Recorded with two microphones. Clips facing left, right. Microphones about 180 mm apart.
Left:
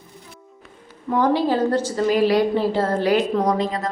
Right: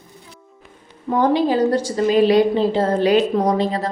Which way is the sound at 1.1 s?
25° right (ahead or behind).